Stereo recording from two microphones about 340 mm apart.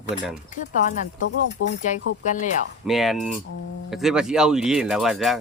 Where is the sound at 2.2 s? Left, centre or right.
Left.